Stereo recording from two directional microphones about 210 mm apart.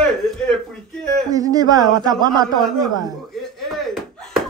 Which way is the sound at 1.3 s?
15° right (ahead or behind).